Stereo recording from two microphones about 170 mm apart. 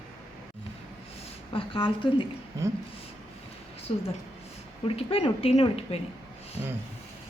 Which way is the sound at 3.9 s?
35° left (ahead or behind).